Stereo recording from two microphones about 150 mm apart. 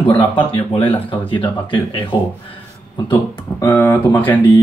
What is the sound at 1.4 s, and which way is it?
Speech, 30° left (ahead or behind).